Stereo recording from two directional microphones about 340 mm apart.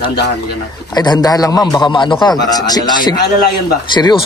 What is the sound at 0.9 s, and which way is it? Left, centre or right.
A man's voice, centre.